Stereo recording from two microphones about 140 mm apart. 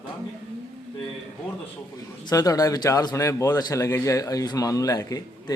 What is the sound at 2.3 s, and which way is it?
A man's voice, 25° left (ahead or behind).